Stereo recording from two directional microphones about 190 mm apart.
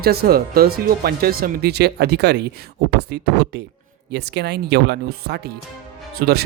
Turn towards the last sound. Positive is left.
turn(degrees=-55)  # may be behind; listen again after turning